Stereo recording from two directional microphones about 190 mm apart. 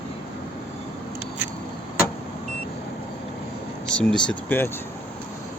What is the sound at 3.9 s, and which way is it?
Speech, 5° left (ahead or behind).